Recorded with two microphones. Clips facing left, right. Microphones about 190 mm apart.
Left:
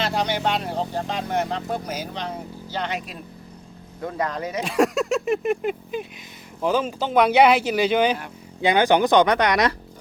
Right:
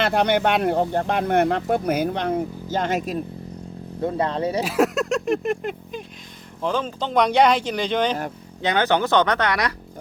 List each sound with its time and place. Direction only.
0.0 s speech: 55° right (ahead or behind)
4.0 s speech: 30° right (ahead or behind)
4.6 s speech: centre (ahead or behind); by 9.7 s 20° left (ahead or behind)